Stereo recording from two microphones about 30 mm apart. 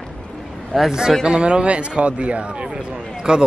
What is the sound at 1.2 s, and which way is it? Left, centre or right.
A man's voice, right.